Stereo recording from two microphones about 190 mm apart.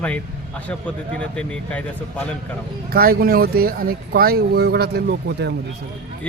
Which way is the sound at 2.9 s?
50° right (ahead or behind).